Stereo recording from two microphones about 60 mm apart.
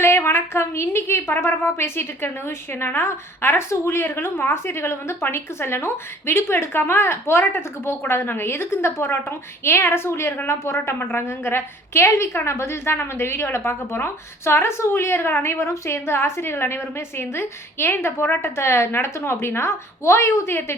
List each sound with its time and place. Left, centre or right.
0.0 s a woman's voice: left